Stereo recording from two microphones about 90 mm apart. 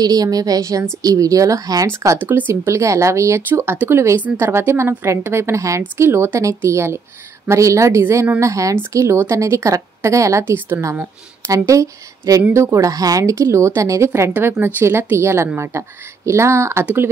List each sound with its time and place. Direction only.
0.0 s a woman's voice: 45° right (ahead or behind)
1.9 s speech: 30° right (ahead or behind)